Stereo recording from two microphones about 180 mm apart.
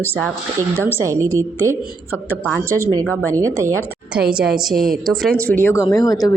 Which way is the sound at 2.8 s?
20° right (ahead or behind).